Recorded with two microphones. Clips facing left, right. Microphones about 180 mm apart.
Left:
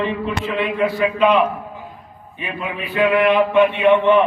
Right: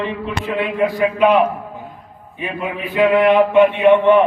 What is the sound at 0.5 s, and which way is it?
A man's voice, 15° right (ahead or behind).